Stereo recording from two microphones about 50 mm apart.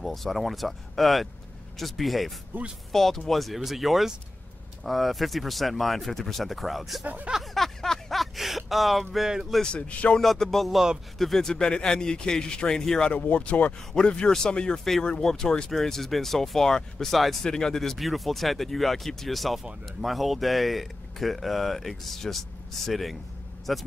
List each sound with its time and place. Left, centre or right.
0.0 s speech: centre
2.5 s speech: right
2.9 s speech: centre
7.5 s a sound: centre
9.6 s speech: left
10.2 s a man's voice: centre
13.1 s a man's voice: left
15.7 s a man's voice: centre